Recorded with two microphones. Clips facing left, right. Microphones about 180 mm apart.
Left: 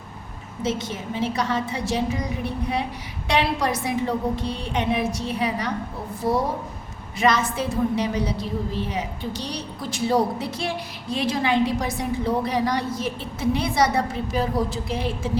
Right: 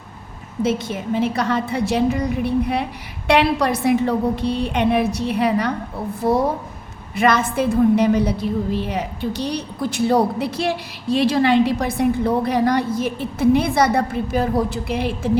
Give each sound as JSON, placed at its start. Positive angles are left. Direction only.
{"t": 0.6, "sound": "a woman's voice", "side_deg": -55}
{"t": 3.2, "sound": "a woman's voice", "side_deg": -60}
{"t": 11.1, "sound": "a woman's voice", "side_deg": -70}